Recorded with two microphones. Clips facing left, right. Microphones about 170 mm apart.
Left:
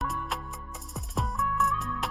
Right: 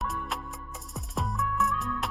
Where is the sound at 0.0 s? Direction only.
Centre (ahead or behind).